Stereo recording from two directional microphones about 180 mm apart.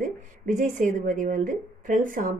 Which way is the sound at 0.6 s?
45° right (ahead or behind).